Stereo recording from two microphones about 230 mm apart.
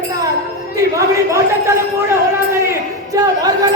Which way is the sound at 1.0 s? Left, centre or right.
Centre.